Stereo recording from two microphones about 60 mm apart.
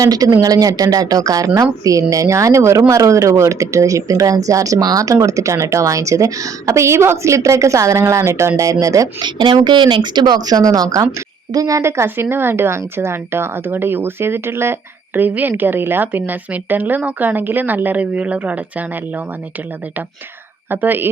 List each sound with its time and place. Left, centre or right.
0.0 s speech: right
5.1 s a woman's voice: right
10.4 s speech: right
11.5 s speech: right
11.8 s speech: right
20.7 s speech: right